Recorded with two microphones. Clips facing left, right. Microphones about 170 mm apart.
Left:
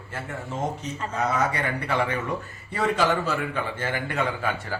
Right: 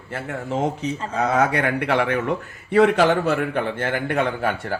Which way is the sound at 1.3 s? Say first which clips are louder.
Right 9 dB; 80° right.